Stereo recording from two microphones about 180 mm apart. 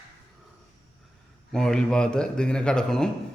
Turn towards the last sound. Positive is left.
turn(degrees=5)  # may be behind; listen again after turning